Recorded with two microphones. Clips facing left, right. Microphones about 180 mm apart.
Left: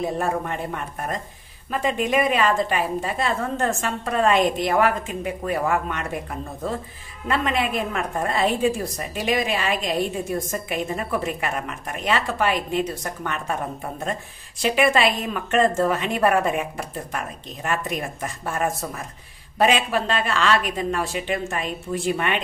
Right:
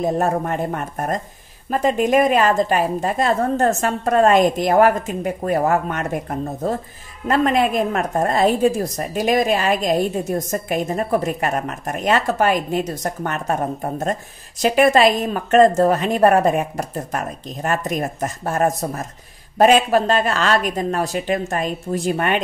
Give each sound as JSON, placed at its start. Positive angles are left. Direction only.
{"t": 0.0, "sound": "a woman's voice", "side_deg": -45}